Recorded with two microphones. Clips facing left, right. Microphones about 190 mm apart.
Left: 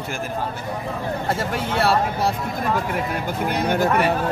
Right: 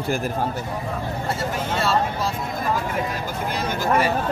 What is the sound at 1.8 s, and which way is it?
Speech, 60° left (ahead or behind).